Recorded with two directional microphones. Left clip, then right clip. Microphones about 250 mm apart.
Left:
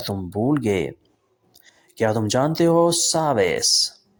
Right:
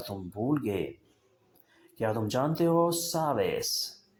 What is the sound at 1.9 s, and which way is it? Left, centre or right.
Speech, left.